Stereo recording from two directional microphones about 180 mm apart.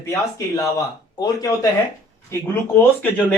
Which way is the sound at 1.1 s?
20° left (ahead or behind).